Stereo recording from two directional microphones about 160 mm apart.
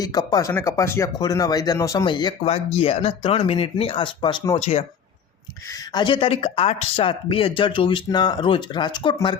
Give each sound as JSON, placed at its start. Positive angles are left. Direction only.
{"t": 0.0, "sound": "speech", "side_deg": 25}
{"t": 4.6, "sound": "speech", "side_deg": 40}
{"t": 5.6, "sound": "speech", "side_deg": 25}